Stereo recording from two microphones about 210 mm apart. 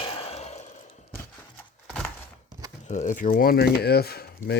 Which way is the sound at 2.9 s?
35° left (ahead or behind).